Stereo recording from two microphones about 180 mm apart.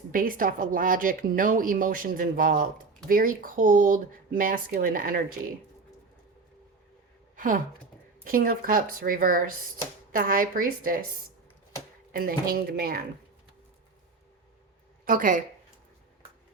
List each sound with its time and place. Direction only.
0.1 s a woman's voice: 50° right (ahead or behind)
7.3 s a woman's voice: 50° right (ahead or behind)
12.1 s a woman's voice: 55° right (ahead or behind)
15.0 s speech: 50° right (ahead or behind)